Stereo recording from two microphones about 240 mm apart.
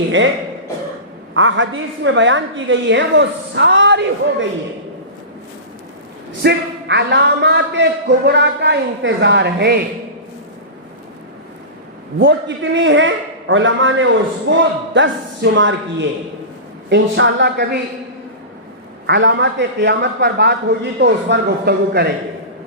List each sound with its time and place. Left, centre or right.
1.3 s a man's voice: right
6.4 s a man's voice: right
12.2 s a man's voice: right
19.0 s a man's voice: right